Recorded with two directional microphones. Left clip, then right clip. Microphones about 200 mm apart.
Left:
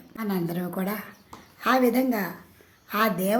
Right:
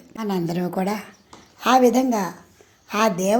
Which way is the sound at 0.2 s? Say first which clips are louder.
Right 5 dB; 25° right (ahead or behind).